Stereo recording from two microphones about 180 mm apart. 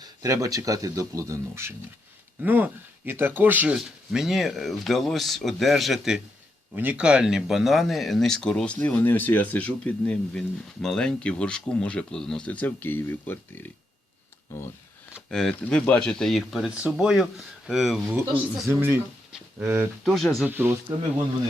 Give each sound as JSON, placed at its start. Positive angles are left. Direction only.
{"t": 0.0, "sound": "speech", "side_deg": -20}
{"t": 15.3, "sound": "speech", "side_deg": 5}
{"t": 18.7, "sound": "speech", "side_deg": -10}
{"t": 20.1, "sound": "speech", "side_deg": 0}
{"t": 20.5, "sound": "speech", "side_deg": -10}